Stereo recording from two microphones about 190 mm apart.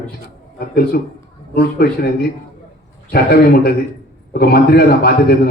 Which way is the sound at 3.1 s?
55° left (ahead or behind).